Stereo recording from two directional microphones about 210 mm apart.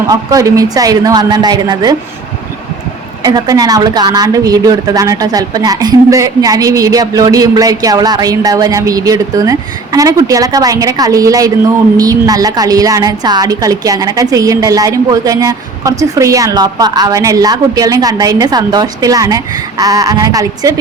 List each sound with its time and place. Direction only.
0.1 s a woman's voice: 15° right (ahead or behind)
3.2 s a woman's voice: 15° right (ahead or behind)